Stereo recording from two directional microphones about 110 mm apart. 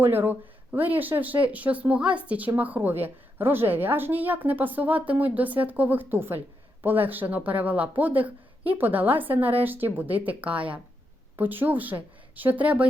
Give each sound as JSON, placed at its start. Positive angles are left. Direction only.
{"t": 0.0, "sound": "a woman's voice", "side_deg": -20}